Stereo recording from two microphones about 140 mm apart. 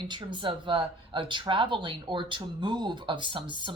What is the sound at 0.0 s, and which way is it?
Speech, 35° right (ahead or behind).